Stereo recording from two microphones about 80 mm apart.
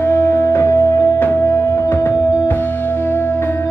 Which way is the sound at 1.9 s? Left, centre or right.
Left.